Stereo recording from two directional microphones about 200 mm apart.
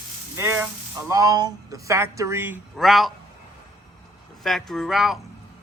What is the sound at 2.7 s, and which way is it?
Speech, centre (ahead or behind).